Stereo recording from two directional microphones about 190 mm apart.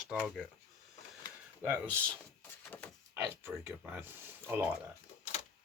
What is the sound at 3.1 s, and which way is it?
Speech, 15° right (ahead or behind).